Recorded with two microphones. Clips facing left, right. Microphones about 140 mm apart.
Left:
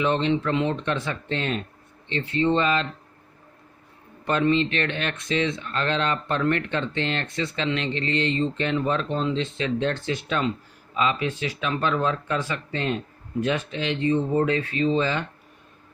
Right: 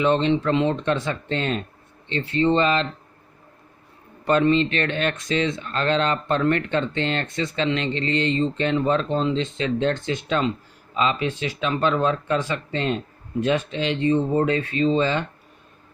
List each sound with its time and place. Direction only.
0.0 s speech: 30° right (ahead or behind)
4.3 s speech: 35° right (ahead or behind)